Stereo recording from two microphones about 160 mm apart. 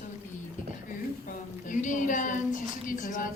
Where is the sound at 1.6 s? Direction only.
50° left (ahead or behind).